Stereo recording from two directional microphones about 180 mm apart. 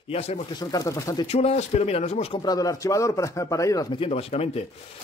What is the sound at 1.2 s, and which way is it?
Speech, 35° left (ahead or behind).